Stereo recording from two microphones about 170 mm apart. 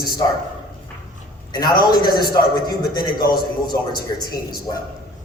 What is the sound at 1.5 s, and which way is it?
A man's voice, 25° left (ahead or behind).